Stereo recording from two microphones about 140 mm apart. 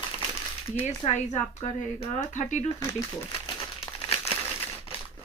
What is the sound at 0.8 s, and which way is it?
Speech, 50° left (ahead or behind).